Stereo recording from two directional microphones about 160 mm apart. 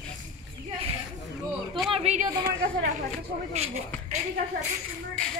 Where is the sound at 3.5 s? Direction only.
45° right (ahead or behind).